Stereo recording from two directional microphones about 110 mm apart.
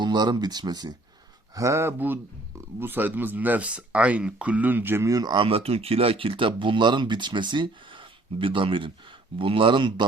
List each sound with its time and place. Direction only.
0.0 s speech: 40° right (ahead or behind)
1.5 s speech: 25° right (ahead or behind); by 10.1 s 45° right (ahead or behind)